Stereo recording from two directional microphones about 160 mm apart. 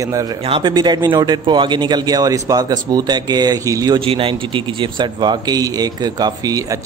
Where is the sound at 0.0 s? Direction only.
20° right (ahead or behind).